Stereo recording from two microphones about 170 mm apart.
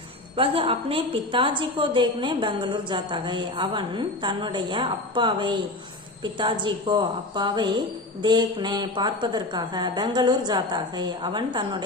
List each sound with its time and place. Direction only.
0.3 s a woman's voice: 35° right (ahead or behind)